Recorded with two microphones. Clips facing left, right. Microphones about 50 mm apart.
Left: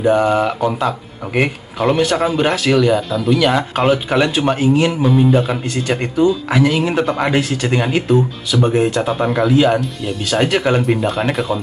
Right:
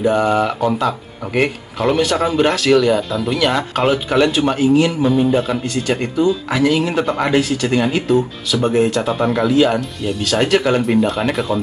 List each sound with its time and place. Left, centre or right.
0.0 s speech: centre
4.6 s speech: left
5.0 s speech: centre
5.5 s speech: centre